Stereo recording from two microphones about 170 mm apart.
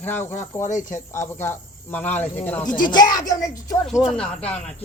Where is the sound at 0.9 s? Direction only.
15° left (ahead or behind).